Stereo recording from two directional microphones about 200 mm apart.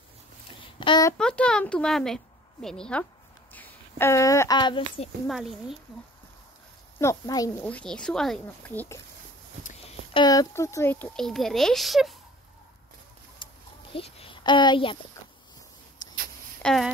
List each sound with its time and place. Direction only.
0.5 s a sound: 25° left (ahead or behind)
1.1 s a woman's voice: 5° left (ahead or behind); by 5.1 s 25° left (ahead or behind)
5.2 s a woman's voice: centre (ahead or behind)
7.0 s speech: 15° left (ahead or behind)
7.6 s a woman's voice: 5° left (ahead or behind)
9.6 s speech: 35° left (ahead or behind); by 12.2 s centre (ahead or behind)
13.4 s a sound: 25° left (ahead or behind)
13.9 s a child's voice: 25° left (ahead or behind)
16.0 s a sound: 20° left (ahead or behind)
16.6 s a woman's voice: centre (ahead or behind)